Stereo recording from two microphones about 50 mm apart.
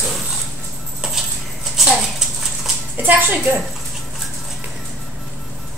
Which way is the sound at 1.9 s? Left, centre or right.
Centre.